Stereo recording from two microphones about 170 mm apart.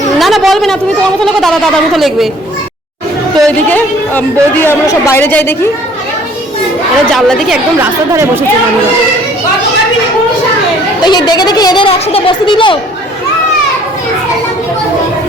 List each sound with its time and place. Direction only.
0.2 s a sound: centre (ahead or behind)
1.2 s a woman's voice: centre (ahead or behind)
3.3 s a woman's voice: 5° left (ahead or behind)
7.1 s a woman's voice: centre (ahead or behind)
7.8 s speech: 15° right (ahead or behind)
11.0 s speech: 25° left (ahead or behind)